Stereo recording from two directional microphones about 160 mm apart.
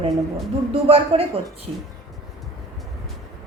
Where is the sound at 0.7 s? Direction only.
35° right (ahead or behind).